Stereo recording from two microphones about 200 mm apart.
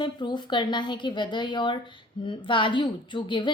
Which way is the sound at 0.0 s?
20° left (ahead or behind).